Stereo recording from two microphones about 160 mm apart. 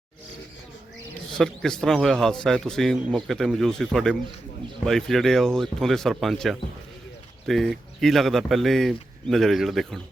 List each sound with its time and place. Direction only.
1.3 s a man's voice: 5° left (ahead or behind)